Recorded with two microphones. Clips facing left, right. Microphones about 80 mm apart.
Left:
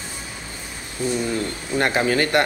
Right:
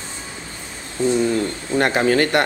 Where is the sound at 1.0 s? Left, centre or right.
Right.